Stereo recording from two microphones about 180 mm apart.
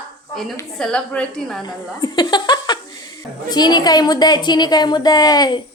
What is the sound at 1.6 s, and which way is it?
Speech, 25° left (ahead or behind).